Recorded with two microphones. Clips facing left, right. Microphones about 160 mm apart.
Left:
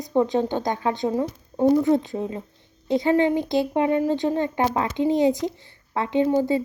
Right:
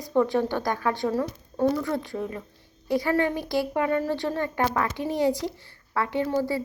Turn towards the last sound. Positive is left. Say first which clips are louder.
# left 5 dB
turn(degrees=20)  # may be behind; listen again after turning